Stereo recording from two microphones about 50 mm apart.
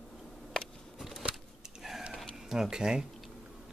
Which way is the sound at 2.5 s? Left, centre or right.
Centre.